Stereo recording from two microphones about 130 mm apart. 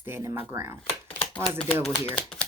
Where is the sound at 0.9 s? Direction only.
45° left (ahead or behind).